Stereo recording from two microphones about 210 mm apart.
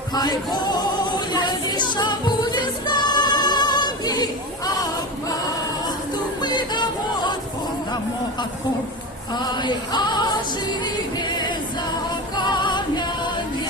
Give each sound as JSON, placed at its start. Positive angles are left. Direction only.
{"t": 0.1, "sound": "music", "side_deg": 20}
{"t": 6.4, "sound": "music", "side_deg": 20}
{"t": 9.3, "sound": "music", "side_deg": 20}